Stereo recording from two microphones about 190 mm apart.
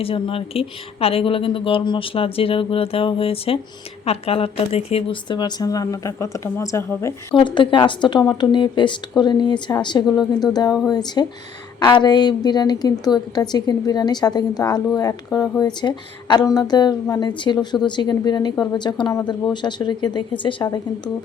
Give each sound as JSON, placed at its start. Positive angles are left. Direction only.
{"t": 0.0, "sound": "speech", "side_deg": 30}